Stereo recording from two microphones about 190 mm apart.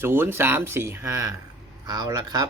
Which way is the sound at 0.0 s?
10° right (ahead or behind).